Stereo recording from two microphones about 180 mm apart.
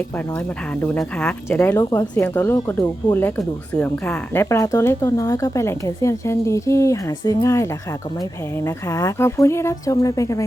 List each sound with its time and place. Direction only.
0.8 s speech: 5° left (ahead or behind)
4.4 s speech: 20° left (ahead or behind)